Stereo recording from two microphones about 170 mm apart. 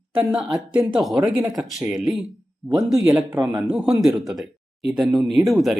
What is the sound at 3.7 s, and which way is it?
Speech, 5° right (ahead or behind).